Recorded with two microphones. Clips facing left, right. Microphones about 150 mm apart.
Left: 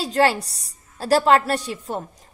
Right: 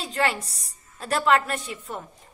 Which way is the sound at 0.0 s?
35° left (ahead or behind).